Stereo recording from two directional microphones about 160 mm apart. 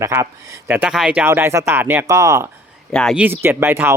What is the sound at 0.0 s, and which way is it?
Speech, 15° right (ahead or behind).